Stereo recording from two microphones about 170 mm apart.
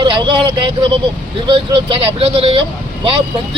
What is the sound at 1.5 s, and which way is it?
Speech, 30° right (ahead or behind).